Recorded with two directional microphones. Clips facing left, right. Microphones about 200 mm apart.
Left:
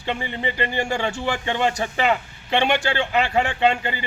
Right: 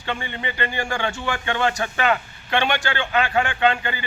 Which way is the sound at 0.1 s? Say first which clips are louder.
Left 2 dB; 25° left (ahead or behind).